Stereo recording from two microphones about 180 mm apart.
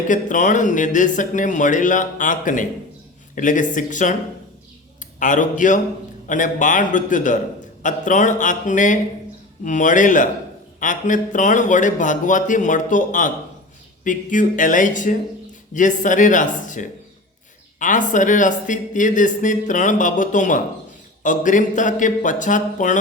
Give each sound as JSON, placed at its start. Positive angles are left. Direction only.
{"t": 0.1, "sound": "speech", "side_deg": 45}
{"t": 5.2, "sound": "speech", "side_deg": 45}